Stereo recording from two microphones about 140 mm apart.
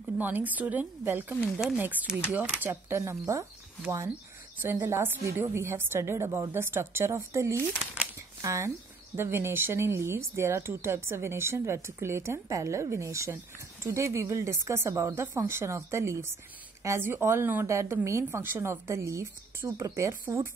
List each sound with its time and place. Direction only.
0.2 s speech: 10° right (ahead or behind)
4.6 s speech: 15° right (ahead or behind)
7.8 s crumpling: 10° right (ahead or behind)
8.4 s speech: 20° right (ahead or behind)